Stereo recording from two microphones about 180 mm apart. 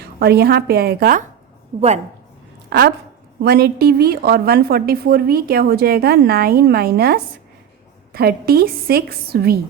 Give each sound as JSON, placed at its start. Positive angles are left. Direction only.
{"t": 0.0, "sound": "a woman's voice", "side_deg": -60}
{"t": 2.6, "sound": "a woman's voice", "side_deg": -55}